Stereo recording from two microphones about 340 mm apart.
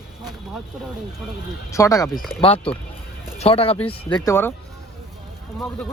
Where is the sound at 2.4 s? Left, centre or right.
Centre.